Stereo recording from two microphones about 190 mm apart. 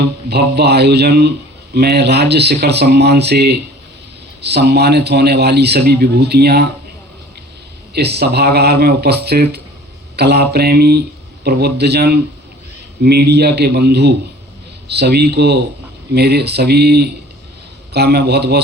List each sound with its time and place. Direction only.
0.3 s a man's voice: 60° right (ahead or behind)
7.9 s a man's voice: 60° right (ahead or behind)